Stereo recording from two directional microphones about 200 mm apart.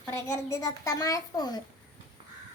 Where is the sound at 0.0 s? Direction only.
15° left (ahead or behind).